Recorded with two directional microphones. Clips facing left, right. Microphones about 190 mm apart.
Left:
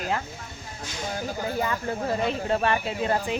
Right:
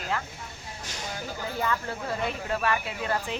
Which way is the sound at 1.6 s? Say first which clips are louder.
Left 1 dB; 25° left (ahead or behind).